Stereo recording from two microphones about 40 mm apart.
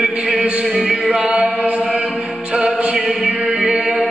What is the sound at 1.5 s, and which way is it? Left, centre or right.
Chant, right.